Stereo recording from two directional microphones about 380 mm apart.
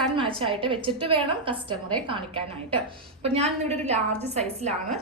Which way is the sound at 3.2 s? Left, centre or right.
Centre.